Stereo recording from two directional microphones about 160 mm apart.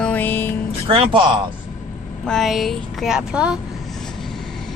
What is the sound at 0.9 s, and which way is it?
Speech, 30° right (ahead or behind).